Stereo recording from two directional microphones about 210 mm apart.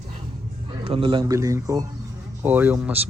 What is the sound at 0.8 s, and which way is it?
A man's voice, 25° right (ahead or behind).